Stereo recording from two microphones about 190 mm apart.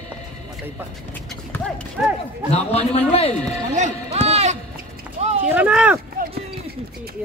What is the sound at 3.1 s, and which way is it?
Speech, 30° left (ahead or behind).